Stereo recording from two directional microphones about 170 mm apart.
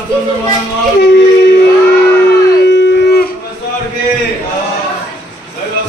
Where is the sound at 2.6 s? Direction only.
90° left.